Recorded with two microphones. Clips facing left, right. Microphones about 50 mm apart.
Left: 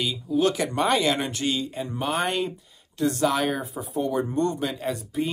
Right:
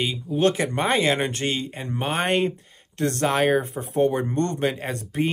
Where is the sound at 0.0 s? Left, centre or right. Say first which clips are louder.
Right 1 dB; right.